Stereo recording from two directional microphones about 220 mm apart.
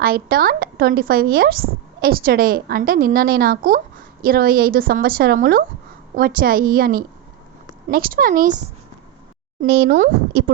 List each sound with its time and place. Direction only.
0.0 s a woman's voice: 45° right (ahead or behind)
9.6 s speech: 50° right (ahead or behind)